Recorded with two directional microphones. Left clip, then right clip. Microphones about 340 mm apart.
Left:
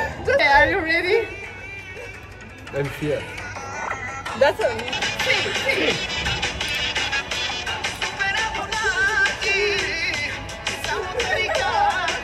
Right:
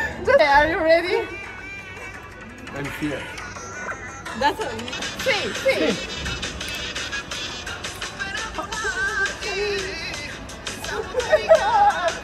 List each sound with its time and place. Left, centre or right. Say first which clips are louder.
0.0 s speech: right 2 dB; centre
3.8 s speech: left 4 dB; centre
5.8 s music: left 2 dB; left